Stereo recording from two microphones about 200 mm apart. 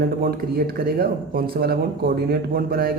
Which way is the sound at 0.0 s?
50° right (ahead or behind).